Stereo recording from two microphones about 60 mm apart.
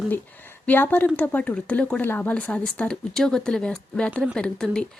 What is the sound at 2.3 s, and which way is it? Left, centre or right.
A woman's voice, centre.